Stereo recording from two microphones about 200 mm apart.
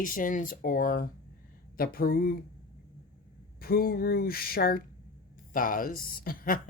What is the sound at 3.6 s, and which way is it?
Speech, 45° left (ahead or behind).